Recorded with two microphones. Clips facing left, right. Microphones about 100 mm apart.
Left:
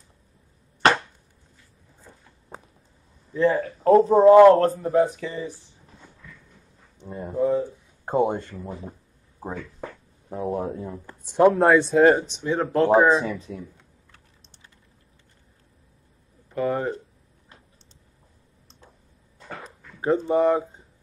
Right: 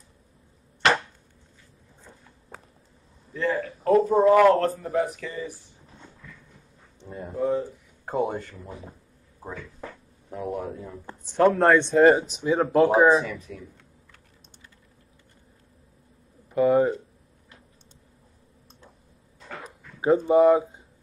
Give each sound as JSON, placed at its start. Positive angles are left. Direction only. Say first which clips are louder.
{"t": 3.4, "sound": "speech", "louder": "left 5 dB", "side_deg": 35}
{"t": 4.2, "sound": "a man's voice", "louder": "left 6 dB", "side_deg": 20}
{"t": 7.2, "sound": "a man's voice", "louder": "left 3 dB", "side_deg": 30}
{"t": 11.2, "sound": "speech", "louder": "left 3 dB", "side_deg": 15}
{"t": 11.5, "sound": "speech", "louder": "left 1 dB", "side_deg": 5}
{"t": 13.2, "sound": "a man's voice", "louder": "left 4 dB", "side_deg": 30}
{"t": 16.6, "sound": "speech", "louder": "right 6 dB", "side_deg": 0}
{"t": 19.6, "sound": "dog", "louder": "right 2 dB", "side_deg": -10}